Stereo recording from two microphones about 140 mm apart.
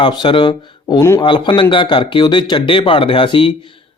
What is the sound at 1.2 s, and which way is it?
Speech, 35° left (ahead or behind).